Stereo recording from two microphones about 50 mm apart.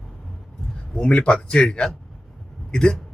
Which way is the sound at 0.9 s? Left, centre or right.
Centre.